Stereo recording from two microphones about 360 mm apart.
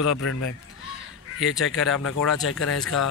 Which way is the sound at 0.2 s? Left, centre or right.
Left.